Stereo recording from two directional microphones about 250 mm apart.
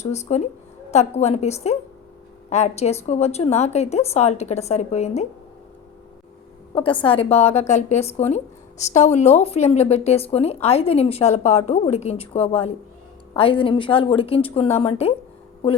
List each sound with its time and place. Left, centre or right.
0.0 s speech: left
7.0 s speech: left